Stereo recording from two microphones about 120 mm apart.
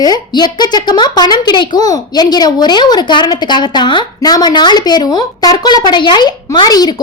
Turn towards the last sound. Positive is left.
turn(degrees=35)  # may be behind; listen again after turning